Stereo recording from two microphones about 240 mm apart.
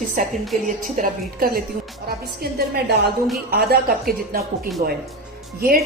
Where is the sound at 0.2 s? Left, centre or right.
Right.